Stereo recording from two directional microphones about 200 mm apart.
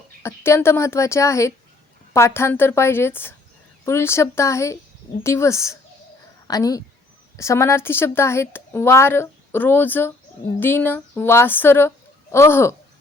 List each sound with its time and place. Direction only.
0.2 s a woman's voice: 15° left (ahead or behind)